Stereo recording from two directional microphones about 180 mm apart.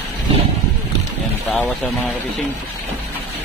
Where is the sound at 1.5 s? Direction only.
10° left (ahead or behind).